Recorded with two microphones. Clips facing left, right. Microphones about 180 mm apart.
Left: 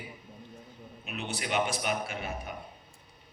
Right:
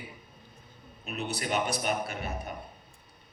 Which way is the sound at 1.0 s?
40° right (ahead or behind).